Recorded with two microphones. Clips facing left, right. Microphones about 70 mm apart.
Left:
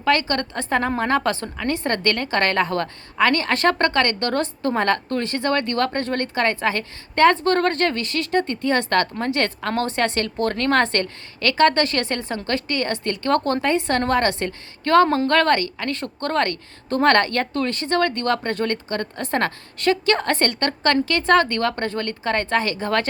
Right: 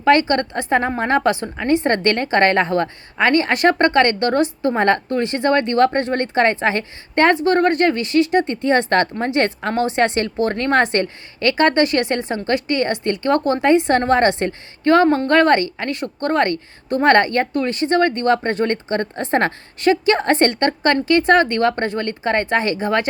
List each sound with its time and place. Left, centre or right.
0.0 s a woman's voice: right
7.3 s a woman's voice: centre
15.0 s a woman's voice: centre
15.3 s a woman's voice: right